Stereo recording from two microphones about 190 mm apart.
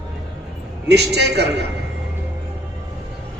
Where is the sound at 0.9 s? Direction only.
60° right (ahead or behind).